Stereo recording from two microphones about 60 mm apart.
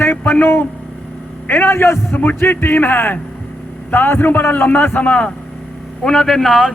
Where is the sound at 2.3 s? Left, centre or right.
Left.